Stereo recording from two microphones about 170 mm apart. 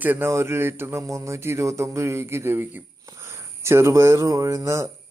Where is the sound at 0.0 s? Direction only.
10° right (ahead or behind).